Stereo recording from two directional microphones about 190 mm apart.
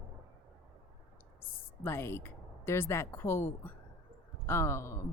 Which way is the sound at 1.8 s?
10° left (ahead or behind).